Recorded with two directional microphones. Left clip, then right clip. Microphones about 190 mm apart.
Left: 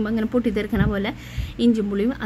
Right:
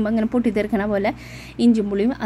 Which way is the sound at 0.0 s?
15° right (ahead or behind).